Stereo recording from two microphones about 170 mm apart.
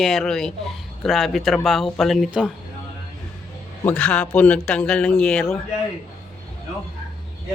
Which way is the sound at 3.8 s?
5° left (ahead or behind).